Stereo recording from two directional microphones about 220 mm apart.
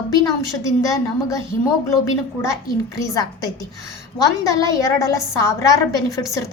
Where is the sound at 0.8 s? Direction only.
15° left (ahead or behind).